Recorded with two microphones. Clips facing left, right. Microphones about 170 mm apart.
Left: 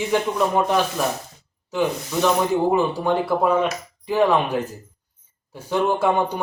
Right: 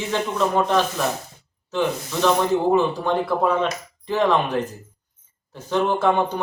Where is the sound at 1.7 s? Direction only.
10° left (ahead or behind).